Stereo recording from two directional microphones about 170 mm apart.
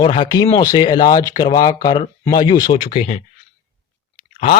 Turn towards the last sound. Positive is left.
turn(degrees=45)  # may be behind; listen again after turning